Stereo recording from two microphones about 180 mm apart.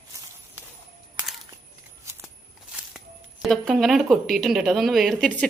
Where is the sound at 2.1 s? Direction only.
15° right (ahead or behind).